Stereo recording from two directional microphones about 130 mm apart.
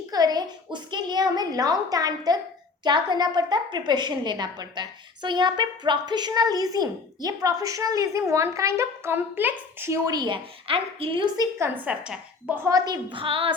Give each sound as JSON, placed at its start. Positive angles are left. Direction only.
{"t": 0.1, "sound": "a sound", "side_deg": -30}
{"t": 2.8, "sound": "a woman's voice", "side_deg": -35}
{"t": 10.1, "sound": "a woman's voice", "side_deg": -35}
{"t": 11.3, "sound": "a woman's voice", "side_deg": -20}
{"t": 11.9, "sound": "a woman's voice", "side_deg": -10}
{"t": 12.6, "sound": "a woman's voice", "side_deg": -30}